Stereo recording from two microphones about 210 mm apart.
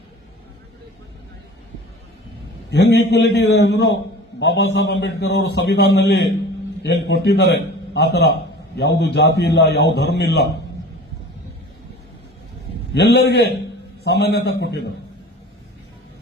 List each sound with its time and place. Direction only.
2.6 s a man's voice: 55° left (ahead or behind)
12.9 s a man's voice: 50° left (ahead or behind)